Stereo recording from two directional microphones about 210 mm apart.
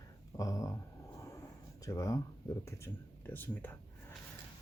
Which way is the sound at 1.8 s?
15° left (ahead or behind).